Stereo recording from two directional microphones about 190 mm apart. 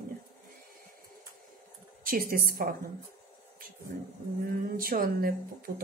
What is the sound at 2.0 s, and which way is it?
Speech, 45° right (ahead or behind).